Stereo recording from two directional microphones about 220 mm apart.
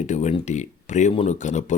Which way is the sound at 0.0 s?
30° left (ahead or behind).